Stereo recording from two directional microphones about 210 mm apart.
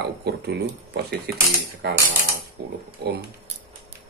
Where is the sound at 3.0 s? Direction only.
50° right (ahead or behind).